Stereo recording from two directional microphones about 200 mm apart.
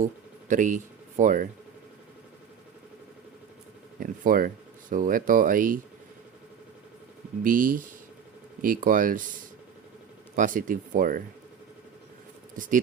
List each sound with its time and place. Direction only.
0.0 s speech: 40° right (ahead or behind)
4.0 s speech: 45° right (ahead or behind)
7.4 s speech: 45° right (ahead or behind)
10.3 s speech: 40° right (ahead or behind)
12.5 s speech: 40° right (ahead or behind)